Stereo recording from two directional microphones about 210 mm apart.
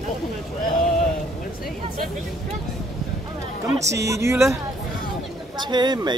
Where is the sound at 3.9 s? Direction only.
15° right (ahead or behind).